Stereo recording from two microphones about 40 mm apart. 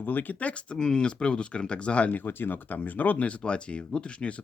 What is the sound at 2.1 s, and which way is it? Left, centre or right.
Speech, left.